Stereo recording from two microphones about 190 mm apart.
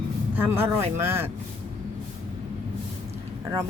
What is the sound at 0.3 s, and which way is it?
Speech, 10° right (ahead or behind).